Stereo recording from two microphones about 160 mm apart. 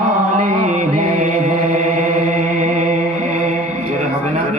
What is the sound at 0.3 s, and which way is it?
Mantra, 50° right (ahead or behind).